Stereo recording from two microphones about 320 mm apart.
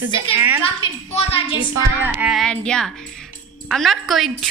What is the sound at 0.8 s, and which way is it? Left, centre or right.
Speech, centre.